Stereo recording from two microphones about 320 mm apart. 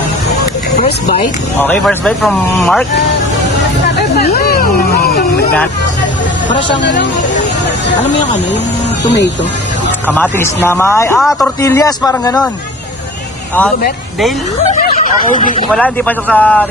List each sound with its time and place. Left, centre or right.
0.8 s speech: left
1.5 s speech: centre
4.3 s a sound: left
6.8 s speech: left
9.0 s speech: left
10.1 s speech: centre
14.8 s vehicle: left
15.4 s a man's voice: left
15.7 s speech: centre